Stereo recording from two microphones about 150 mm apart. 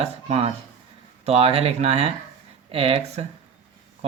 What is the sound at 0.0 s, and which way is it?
Speech, 45° right (ahead or behind).